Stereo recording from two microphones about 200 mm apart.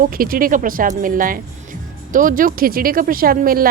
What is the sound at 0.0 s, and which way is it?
Speech, 45° right (ahead or behind).